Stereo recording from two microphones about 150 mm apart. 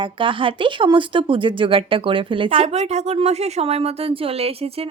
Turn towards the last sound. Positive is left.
turn(degrees=-40)  # may be behind; listen again after turning